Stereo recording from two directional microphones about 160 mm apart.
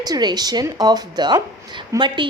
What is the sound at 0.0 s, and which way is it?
A woman's voice, 25° right (ahead or behind).